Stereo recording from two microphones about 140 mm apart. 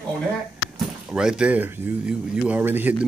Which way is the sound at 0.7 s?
5° right (ahead or behind).